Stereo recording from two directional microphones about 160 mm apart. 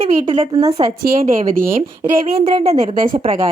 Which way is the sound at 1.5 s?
60° right (ahead or behind).